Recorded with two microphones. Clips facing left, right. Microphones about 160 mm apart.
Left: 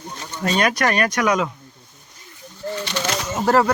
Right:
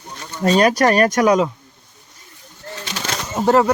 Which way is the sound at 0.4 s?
40° right (ahead or behind).